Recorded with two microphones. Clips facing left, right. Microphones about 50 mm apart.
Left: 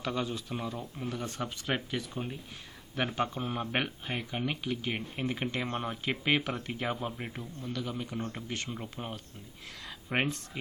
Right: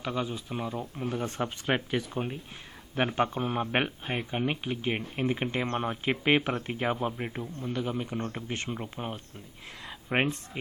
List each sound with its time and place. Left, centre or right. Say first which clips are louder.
0.0 s speech: right 1 dB; centre
1.1 s speech: right 6 dB; right
6.9 s speech: right 5 dB; centre
9.8 s a sound: right 3 dB; centre